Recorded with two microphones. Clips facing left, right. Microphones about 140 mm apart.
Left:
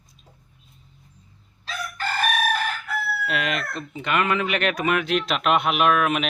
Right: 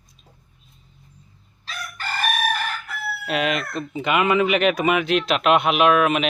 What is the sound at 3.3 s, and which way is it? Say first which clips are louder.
Speech: right 6 dB; 5° right (ahead or behind).